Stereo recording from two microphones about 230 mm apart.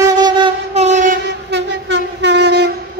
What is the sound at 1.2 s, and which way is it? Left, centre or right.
Train, right.